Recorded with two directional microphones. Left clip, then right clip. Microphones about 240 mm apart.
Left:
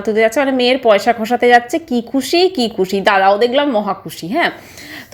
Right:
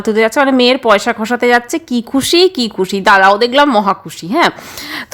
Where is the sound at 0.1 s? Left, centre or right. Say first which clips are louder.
Right 2 dB; centre.